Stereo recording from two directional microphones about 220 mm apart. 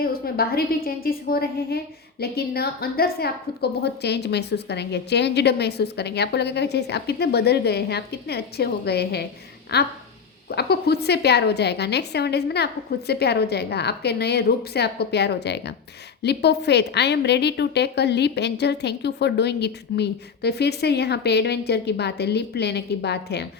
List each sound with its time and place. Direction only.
0.0 s a woman's voice: 45° left (ahead or behind)